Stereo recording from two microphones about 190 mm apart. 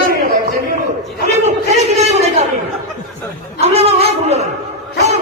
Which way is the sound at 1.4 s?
35° right (ahead or behind).